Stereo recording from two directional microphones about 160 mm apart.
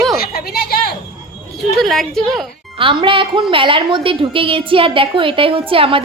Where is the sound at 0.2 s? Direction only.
75° left (ahead or behind).